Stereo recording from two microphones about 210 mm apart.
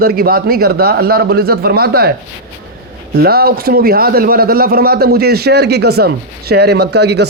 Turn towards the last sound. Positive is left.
turn(degrees=-50)  # may be behind; listen again after turning